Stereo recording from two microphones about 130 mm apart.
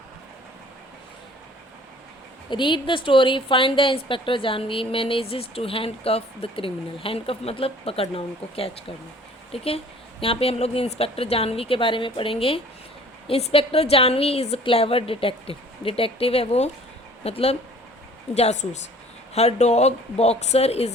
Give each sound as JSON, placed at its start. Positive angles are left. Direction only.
{"t": 2.5, "sound": "speech", "side_deg": 40}